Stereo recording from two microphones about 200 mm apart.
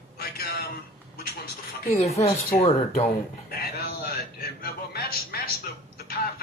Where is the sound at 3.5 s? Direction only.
50° left (ahead or behind).